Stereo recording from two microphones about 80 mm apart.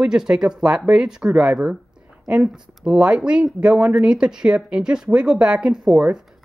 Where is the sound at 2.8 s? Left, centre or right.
Centre.